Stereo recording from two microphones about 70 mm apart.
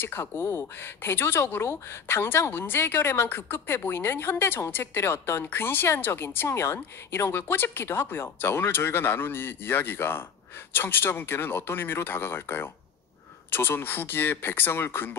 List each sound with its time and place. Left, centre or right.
0.0 s speech: left